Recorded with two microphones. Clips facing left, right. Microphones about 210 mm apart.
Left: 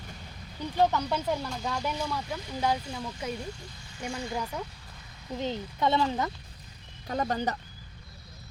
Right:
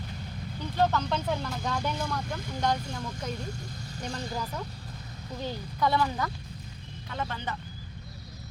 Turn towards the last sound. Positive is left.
turn(degrees=40)  # may be behind; listen again after turning